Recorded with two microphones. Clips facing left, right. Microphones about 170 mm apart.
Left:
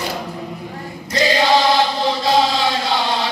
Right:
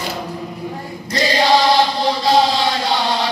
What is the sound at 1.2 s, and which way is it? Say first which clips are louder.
Chant: right 1 dB; 35° right (ahead or behind).